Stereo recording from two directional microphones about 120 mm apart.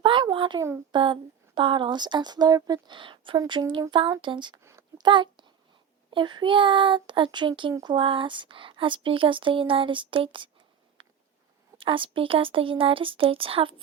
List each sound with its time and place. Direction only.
0.0 s a sound: 45° right (ahead or behind)
0.9 s speech: 40° right (ahead or behind)
4.6 s a sound: 25° right (ahead or behind)
4.9 s a child's voice: 40° right (ahead or behind)
7.7 s speech: 30° right (ahead or behind)
7.9 s speech: 45° right (ahead or behind)
11.8 s speech: 45° right (ahead or behind)